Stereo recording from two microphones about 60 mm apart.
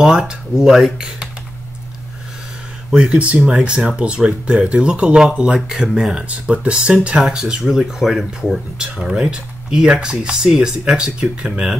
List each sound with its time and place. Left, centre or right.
0.0 s speech: centre
2.9 s speech: centre